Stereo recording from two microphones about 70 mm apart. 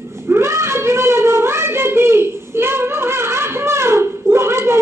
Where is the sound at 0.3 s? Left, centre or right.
Right.